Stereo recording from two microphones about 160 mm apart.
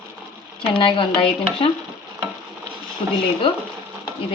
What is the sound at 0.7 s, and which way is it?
Speech, 30° left (ahead or behind).